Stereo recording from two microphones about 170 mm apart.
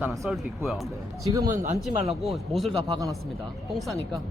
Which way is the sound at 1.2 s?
20° right (ahead or behind).